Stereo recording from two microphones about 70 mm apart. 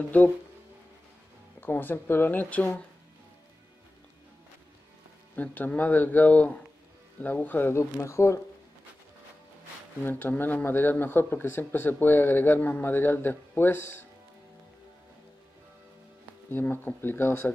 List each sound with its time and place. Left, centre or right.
0.1 s speech: left
1.6 s speech: left
5.3 s speech: left
7.7 s speech: left
10.0 s speech: left
16.4 s speech: left